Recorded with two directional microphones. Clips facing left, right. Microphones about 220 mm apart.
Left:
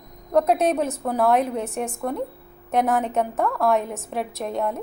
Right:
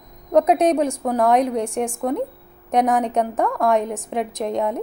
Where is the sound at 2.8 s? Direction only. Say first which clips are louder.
Right 3 dB; centre (ahead or behind).